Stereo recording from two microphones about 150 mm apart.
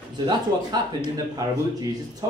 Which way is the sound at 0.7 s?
25° right (ahead or behind).